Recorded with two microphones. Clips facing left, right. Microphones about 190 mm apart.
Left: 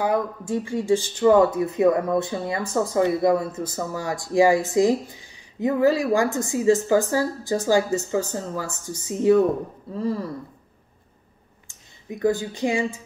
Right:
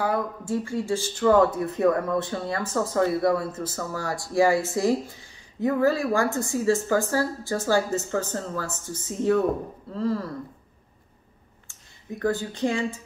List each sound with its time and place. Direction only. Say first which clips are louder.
0.0 s speech: left 3 dB; 15° left (ahead or behind)
12.2 s speech: left 3 dB; 15° left (ahead or behind)